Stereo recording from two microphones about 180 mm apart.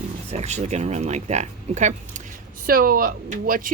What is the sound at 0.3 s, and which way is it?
Speech, 40° right (ahead or behind).